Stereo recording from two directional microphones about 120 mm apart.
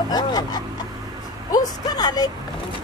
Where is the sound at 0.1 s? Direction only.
35° left (ahead or behind).